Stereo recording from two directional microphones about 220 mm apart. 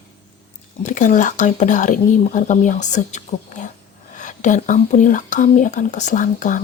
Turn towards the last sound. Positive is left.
turn(degrees=35)  # may be behind; listen again after turning